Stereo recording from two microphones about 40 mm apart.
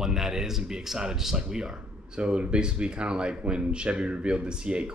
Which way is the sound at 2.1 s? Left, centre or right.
Right.